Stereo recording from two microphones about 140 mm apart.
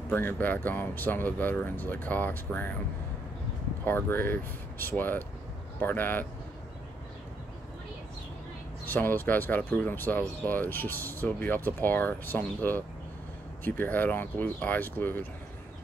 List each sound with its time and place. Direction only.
0.1 s speech: 15° left (ahead or behind)
3.8 s speech: 15° left (ahead or behind)
8.8 s speech: 15° left (ahead or behind)